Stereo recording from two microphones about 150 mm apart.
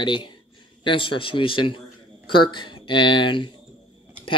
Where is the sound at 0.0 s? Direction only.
35° left (ahead or behind).